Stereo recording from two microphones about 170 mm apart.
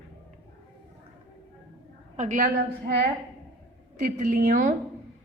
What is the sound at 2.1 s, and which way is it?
Speech, 50° right (ahead or behind).